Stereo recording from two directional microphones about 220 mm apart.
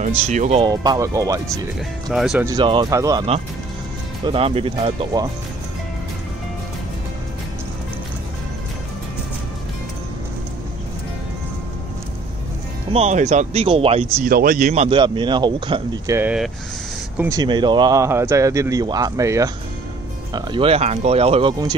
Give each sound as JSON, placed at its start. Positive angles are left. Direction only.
{"t": 0.0, "sound": "speech", "side_deg": -35}
{"t": 0.7, "sound": "speech", "side_deg": -15}
{"t": 2.0, "sound": "speech", "side_deg": 0}
{"t": 2.4, "sound": "a man's voice", "side_deg": -20}
{"t": 12.9, "sound": "a man's voice", "side_deg": -30}
{"t": 14.2, "sound": "a man's voice", "side_deg": -40}